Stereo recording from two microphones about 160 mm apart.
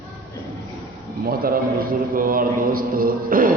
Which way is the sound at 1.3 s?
65° right (ahead or behind).